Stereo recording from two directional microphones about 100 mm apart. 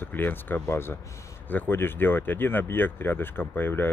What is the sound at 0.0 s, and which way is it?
Speech, 20° left (ahead or behind).